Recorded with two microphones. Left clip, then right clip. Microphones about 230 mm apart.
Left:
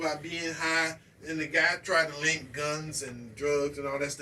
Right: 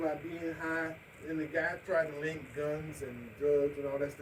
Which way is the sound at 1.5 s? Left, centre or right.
Left.